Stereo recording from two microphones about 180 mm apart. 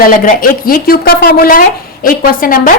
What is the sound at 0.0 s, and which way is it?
A woman's voice, 50° left (ahead or behind).